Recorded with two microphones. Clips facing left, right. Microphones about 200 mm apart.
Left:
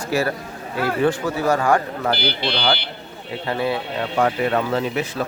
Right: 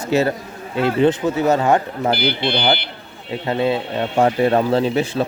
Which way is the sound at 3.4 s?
25° right (ahead or behind).